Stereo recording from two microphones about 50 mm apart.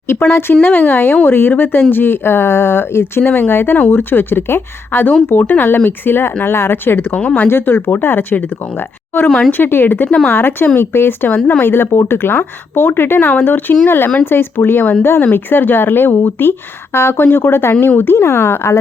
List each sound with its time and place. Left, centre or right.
0.1 s speech: left
0.6 s speech: left
7.2 s speech: left
7.4 s speech: left